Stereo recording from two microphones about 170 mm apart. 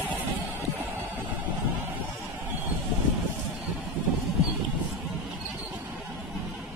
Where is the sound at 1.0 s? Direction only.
10° right (ahead or behind).